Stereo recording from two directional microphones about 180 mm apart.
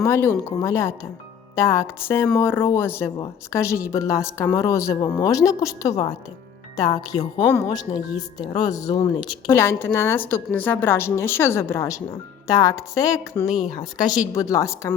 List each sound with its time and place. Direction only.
0.0 s speech: 15° left (ahead or behind)
7.2 s speech: 15° left (ahead or behind)